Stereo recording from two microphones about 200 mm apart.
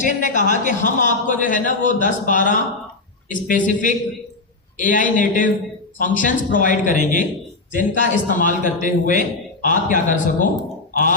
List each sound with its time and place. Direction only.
0.0 s a man's voice: 40° left (ahead or behind)